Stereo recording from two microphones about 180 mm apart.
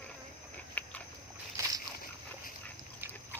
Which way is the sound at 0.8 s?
10° left (ahead or behind).